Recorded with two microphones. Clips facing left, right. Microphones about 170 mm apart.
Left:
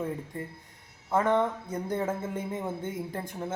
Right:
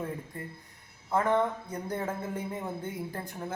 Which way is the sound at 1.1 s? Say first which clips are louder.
Left 1 dB; 20° left (ahead or behind).